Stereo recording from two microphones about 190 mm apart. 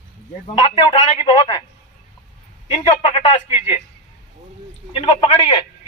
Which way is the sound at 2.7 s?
30° left (ahead or behind).